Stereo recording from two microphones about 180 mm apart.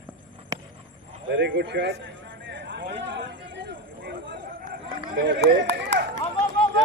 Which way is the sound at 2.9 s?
75° right (ahead or behind).